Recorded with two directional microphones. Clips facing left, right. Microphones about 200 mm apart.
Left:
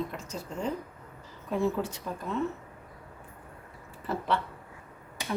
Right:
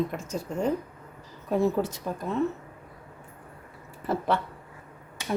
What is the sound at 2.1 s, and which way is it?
Speech, 40° right (ahead or behind).